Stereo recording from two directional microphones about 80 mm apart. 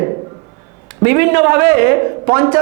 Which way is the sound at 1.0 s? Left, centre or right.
Centre.